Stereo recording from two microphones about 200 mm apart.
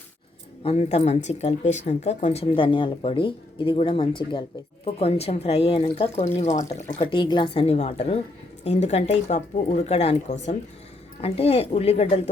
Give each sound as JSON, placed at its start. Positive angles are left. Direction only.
{"t": 0.6, "sound": "speech", "side_deg": 30}
{"t": 7.0, "sound": "speech", "side_deg": 25}